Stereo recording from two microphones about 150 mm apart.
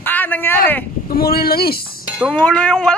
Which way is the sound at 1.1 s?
90° left.